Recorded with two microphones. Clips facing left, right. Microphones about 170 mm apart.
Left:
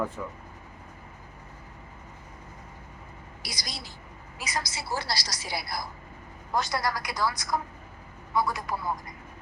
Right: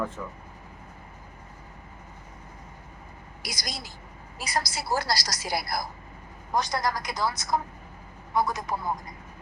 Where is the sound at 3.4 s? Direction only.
45° right (ahead or behind).